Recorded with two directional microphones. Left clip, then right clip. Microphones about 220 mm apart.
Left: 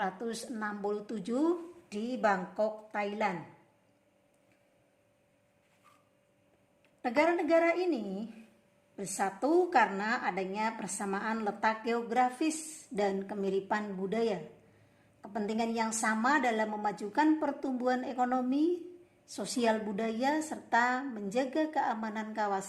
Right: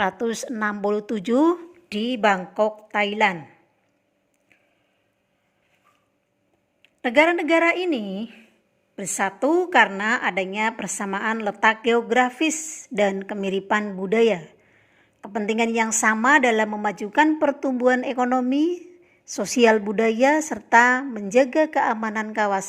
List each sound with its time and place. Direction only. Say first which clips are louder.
0.0 s a woman's voice: right 12 dB; 35° right (ahead or behind)
7.0 s a woman's voice: right 10 dB; 30° right (ahead or behind)
15.6 s a woman's voice: right 12 dB; 30° right (ahead or behind)